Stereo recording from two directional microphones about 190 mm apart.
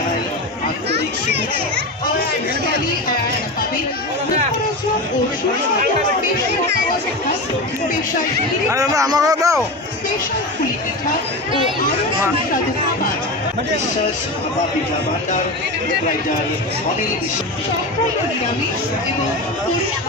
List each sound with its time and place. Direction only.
8.7 s speech: 20° right (ahead or behind)